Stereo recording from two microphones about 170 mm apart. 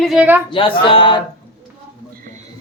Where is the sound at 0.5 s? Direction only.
30° left (ahead or behind).